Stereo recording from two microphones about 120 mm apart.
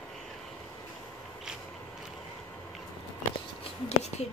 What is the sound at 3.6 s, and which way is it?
Whispering, 65° left (ahead or behind).